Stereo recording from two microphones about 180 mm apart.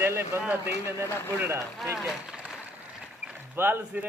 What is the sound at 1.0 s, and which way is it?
Speech, 15° left (ahead or behind).